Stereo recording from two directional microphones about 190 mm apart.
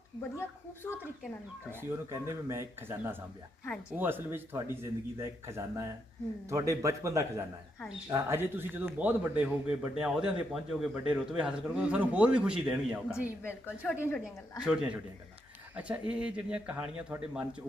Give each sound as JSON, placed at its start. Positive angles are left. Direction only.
{"t": 0.2, "sound": "a woman's voice", "side_deg": 10}
{"t": 1.7, "sound": "a man's voice", "side_deg": -10}
{"t": 13.4, "sound": "a woman's voice", "side_deg": 10}
{"t": 14.6, "sound": "a man's voice", "side_deg": -5}